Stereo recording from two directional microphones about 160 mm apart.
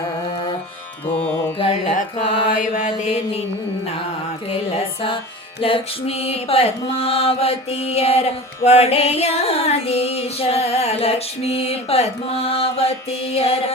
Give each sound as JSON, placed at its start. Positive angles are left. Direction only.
{"t": 1.2, "sound": "music", "side_deg": 35}
{"t": 1.9, "sound": "mantra", "side_deg": 50}
{"t": 2.2, "sound": "mantra", "side_deg": 35}
{"t": 2.7, "sound": "mantra", "side_deg": 45}
{"t": 5.6, "sound": "mantra", "side_deg": 35}